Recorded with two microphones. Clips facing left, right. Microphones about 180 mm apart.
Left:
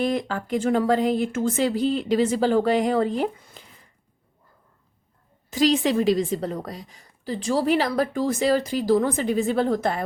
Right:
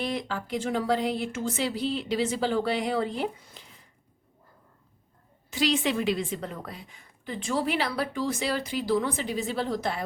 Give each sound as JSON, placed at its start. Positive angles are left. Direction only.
{"t": 0.0, "sound": "a woman's voice", "side_deg": 50}
{"t": 5.5, "sound": "a woman's voice", "side_deg": 40}